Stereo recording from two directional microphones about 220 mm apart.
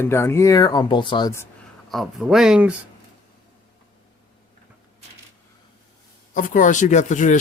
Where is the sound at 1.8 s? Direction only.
Centre (ahead or behind).